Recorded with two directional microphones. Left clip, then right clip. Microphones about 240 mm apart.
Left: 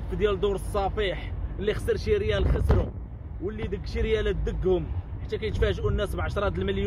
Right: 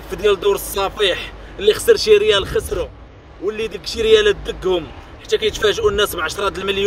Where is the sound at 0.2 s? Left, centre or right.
Right.